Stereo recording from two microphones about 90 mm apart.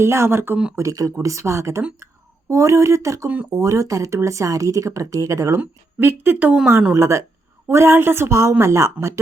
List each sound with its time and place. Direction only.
0.0 s speech: 30° right (ahead or behind)
0.8 s speech: 40° right (ahead or behind)
5.5 s speech: 25° right (ahead or behind)